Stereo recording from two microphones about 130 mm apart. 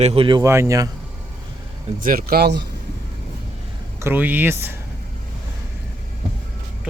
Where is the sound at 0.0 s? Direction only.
50° right (ahead or behind).